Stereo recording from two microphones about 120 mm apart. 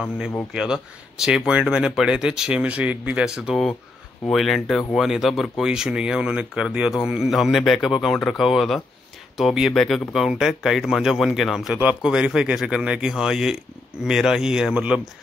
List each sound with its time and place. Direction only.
0.5 s speech: 5° right (ahead or behind)